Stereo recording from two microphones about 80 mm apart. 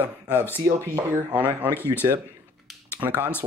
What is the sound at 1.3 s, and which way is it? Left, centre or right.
Speech, right.